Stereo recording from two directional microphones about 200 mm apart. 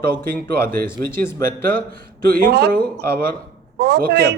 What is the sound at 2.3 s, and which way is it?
A woman's voice, 50° right (ahead or behind).